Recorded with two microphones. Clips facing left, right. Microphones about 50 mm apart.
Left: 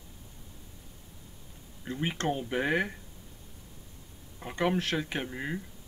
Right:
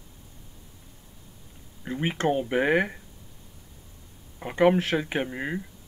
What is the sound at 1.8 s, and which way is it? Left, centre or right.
Speech, centre.